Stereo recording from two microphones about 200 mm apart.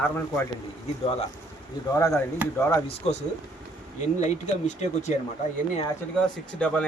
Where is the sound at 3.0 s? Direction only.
30° left (ahead or behind).